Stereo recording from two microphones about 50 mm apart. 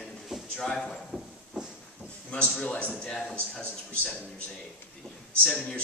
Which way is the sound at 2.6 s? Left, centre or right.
Left.